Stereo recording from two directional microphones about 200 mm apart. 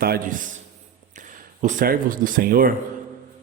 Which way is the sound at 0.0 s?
45° right (ahead or behind).